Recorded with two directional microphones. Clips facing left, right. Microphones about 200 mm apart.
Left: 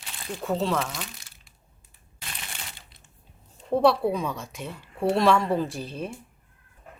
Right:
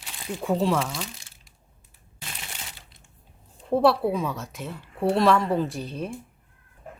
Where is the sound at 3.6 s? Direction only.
5° right (ahead or behind).